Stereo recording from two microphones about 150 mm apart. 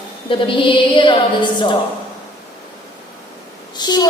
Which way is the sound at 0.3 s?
35° left (ahead or behind).